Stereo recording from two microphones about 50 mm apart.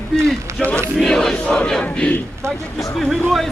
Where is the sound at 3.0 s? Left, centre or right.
Centre.